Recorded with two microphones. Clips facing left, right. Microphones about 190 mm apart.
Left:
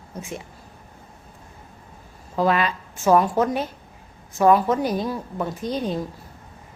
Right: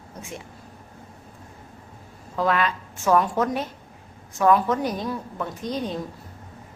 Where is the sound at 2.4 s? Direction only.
10° left (ahead or behind).